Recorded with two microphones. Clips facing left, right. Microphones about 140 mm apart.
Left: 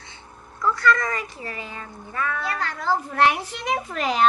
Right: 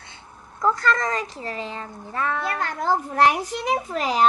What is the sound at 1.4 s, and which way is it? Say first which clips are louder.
Speech: right 4 dB; 30° right (ahead or behind).